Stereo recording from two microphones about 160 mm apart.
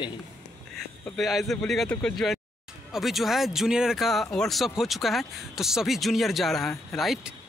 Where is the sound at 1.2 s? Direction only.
Centre (ahead or behind).